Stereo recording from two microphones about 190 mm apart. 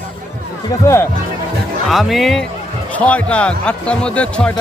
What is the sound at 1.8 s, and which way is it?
A man's voice, centre (ahead or behind).